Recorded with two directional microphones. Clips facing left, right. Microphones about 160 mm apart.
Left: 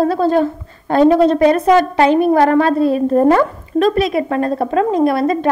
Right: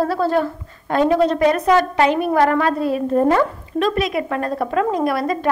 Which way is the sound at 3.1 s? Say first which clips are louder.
Left 2 dB; 40° left (ahead or behind).